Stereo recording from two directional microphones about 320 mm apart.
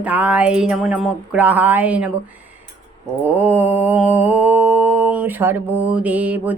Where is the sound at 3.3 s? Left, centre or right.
Centre.